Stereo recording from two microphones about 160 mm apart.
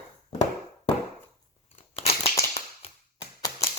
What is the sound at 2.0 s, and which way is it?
Crushing, 40° left (ahead or behind).